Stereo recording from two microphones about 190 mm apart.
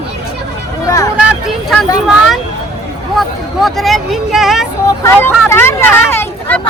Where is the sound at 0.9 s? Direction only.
20° left (ahead or behind).